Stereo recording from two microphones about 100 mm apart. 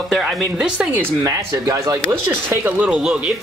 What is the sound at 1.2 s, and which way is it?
Speech, 35° right (ahead or behind).